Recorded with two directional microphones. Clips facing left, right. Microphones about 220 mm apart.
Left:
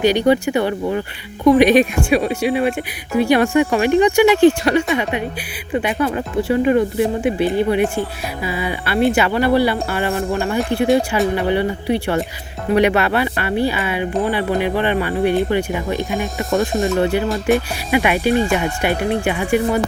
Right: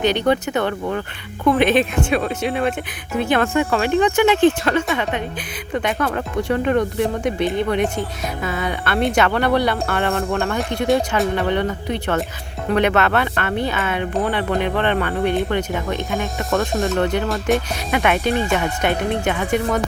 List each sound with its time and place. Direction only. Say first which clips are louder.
0.0 s speech: left 4 dB; 10° left (ahead or behind)
16.4 s speech: left 3 dB; 15° left (ahead or behind)